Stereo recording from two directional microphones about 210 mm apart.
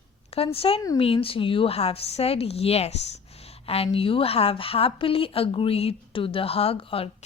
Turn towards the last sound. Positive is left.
turn(degrees=25)  # may be behind; listen again after turning